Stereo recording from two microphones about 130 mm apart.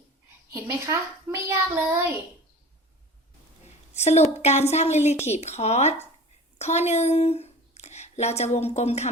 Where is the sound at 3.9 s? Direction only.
60° left (ahead or behind).